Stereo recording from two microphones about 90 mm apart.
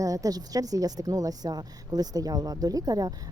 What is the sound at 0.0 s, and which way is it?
A woman's voice, 40° right (ahead or behind).